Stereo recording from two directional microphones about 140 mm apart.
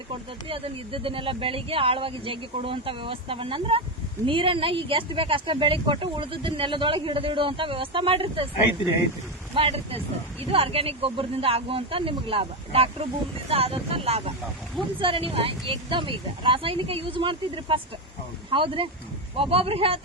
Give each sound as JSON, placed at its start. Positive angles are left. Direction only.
{"t": 0.4, "sound": "speech", "side_deg": -40}
{"t": 9.6, "sound": "speech", "side_deg": -45}